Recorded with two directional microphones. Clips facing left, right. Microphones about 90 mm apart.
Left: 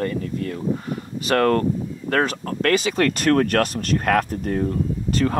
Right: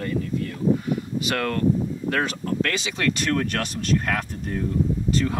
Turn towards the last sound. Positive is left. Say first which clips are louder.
# left 2 dB
turn(degrees=50)  # may be behind; listen again after turning